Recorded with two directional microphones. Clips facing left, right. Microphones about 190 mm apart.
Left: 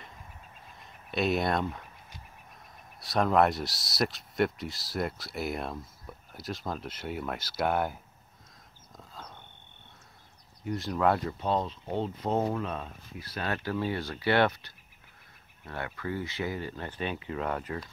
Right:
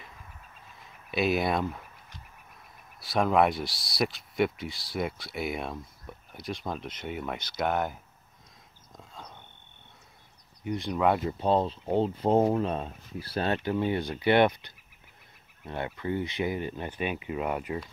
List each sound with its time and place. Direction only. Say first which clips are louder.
1.1 s speech: right 1 dB; centre (ahead or behind)
3.0 s speech: right 1 dB; centre (ahead or behind)
8.9 s a sound: even; centre (ahead or behind)
10.6 s speech: right 1 dB; centre (ahead or behind)
11.2 s speech: right 4 dB; 30° right (ahead or behind); by 17.7 s 15° right (ahead or behind)